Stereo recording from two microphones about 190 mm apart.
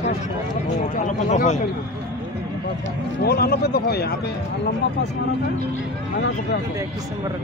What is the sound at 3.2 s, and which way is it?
Speech, 55° left (ahead or behind).